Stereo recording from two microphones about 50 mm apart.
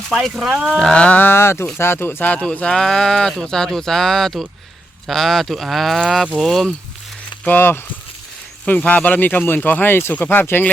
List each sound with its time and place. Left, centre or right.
0.3 s speech: centre
0.8 s speech: centre
1.0 s speech: left
1.3 s speech: left
2.2 s speech: left
2.5 s speech: centre
2.7 s speech: centre
7.4 s speech: left
8.6 s speech: left